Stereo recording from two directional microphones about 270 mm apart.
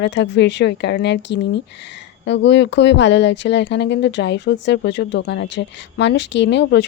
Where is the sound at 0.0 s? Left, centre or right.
Left.